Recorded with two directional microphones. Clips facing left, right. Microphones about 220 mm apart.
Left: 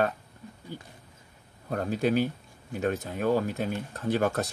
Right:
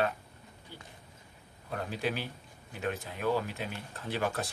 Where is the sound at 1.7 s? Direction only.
45° left (ahead or behind).